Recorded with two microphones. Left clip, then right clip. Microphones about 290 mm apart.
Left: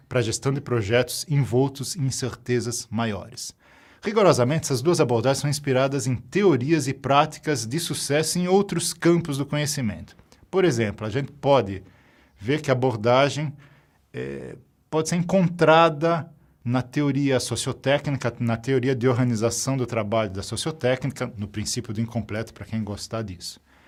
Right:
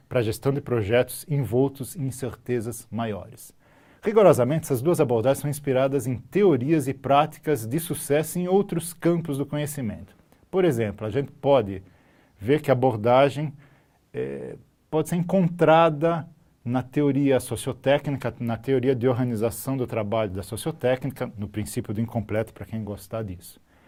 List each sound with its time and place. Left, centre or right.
0.1 s speech: left
1.4 s speech: left
4.0 s speech: left
12.4 s speech: left
22.8 s speech: left